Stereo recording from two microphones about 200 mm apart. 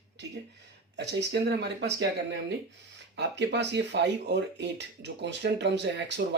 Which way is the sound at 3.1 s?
60° right (ahead or behind).